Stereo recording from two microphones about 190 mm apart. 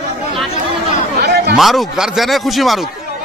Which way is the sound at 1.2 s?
60° right (ahead or behind).